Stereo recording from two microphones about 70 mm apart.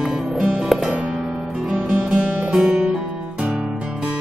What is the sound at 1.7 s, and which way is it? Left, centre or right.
Music, centre.